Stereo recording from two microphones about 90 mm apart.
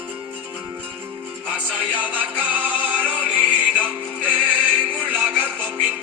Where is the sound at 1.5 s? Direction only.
15° right (ahead or behind).